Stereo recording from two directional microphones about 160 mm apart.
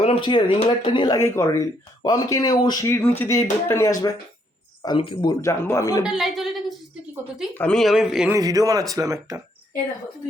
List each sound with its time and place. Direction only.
0.0 s speech: 35° left (ahead or behind)
6.1 s a woman's voice: centre (ahead or behind)
8.3 s a man's voice: 20° right (ahead or behind)